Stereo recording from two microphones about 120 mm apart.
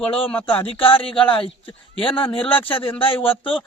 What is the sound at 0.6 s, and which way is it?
Speech, 45° left (ahead or behind).